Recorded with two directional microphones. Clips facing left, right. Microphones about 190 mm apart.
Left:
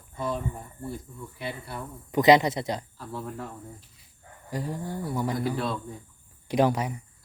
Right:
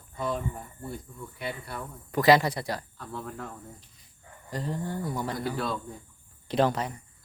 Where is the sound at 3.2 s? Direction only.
5° left (ahead or behind).